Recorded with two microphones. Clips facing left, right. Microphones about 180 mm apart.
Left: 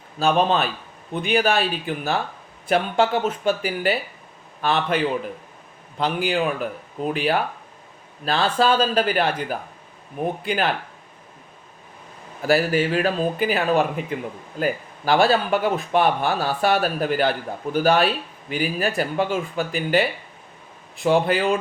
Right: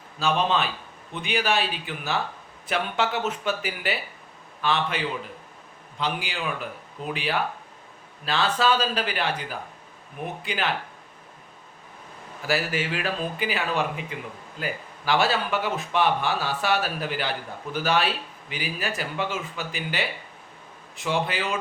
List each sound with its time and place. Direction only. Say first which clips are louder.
0.2 s speech: left 5 dB; 50° left (ahead or behind)
12.5 s speech: left 7 dB; 35° left (ahead or behind); by 20.1 s 55° left (ahead or behind)
21.0 s speech: left 8 dB; 40° left (ahead or behind)